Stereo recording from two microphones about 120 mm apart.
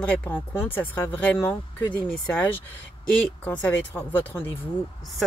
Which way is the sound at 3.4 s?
15° left (ahead or behind).